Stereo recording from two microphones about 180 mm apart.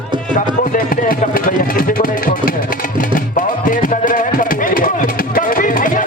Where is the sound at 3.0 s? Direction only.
50° left (ahead or behind).